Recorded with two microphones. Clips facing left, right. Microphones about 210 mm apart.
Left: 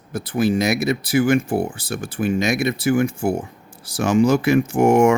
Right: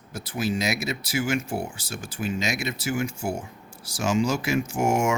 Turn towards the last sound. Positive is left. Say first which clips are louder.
# left 9 dB
turn(degrees=60)  # may be behind; listen again after turning